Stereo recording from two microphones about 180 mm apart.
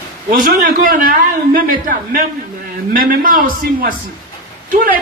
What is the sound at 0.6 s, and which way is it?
Speech, 50° right (ahead or behind).